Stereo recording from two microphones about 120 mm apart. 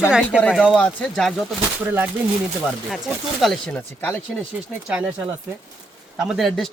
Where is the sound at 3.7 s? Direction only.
15° left (ahead or behind).